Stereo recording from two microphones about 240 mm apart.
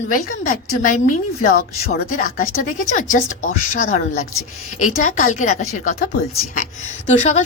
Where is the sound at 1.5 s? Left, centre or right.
Left.